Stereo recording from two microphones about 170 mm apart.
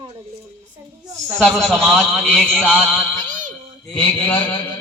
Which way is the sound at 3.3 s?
50° right (ahead or behind).